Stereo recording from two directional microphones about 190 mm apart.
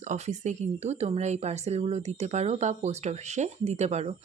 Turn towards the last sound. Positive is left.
turn(degrees=-35)  # may be behind; listen again after turning